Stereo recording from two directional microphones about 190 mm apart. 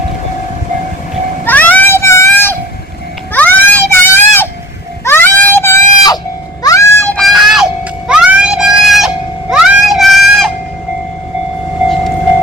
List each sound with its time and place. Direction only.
1.5 s vehicle: 10° left (ahead or behind)
3.3 s a sound: 10° left (ahead or behind)
6.6 s music: 15° left (ahead or behind); by 10.5 s centre (ahead or behind)